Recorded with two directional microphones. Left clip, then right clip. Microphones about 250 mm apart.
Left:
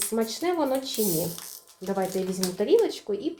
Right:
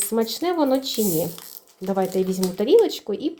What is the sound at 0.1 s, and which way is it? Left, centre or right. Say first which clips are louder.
A woman's voice: right 4 dB; right.